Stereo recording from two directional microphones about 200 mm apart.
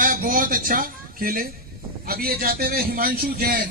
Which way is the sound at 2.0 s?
50° right (ahead or behind).